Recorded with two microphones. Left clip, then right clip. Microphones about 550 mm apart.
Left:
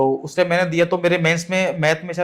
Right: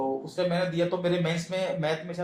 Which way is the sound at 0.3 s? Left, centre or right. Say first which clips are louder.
Left 10 dB; left.